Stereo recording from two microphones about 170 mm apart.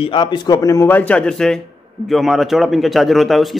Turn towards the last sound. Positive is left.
turn(degrees=0)  # may be behind; listen again after turning